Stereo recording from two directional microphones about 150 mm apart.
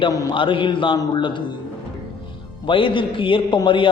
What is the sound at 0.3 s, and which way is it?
A man's voice, 35° left (ahead or behind).